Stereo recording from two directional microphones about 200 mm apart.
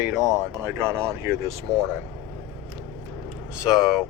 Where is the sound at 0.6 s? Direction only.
10° right (ahead or behind).